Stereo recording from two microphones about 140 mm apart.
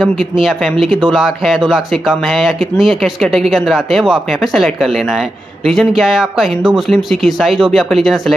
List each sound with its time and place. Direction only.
0.0 s speech: centre (ahead or behind)
5.7 s speech: centre (ahead or behind)